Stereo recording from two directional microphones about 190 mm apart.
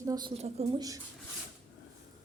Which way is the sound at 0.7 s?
20° right (ahead or behind).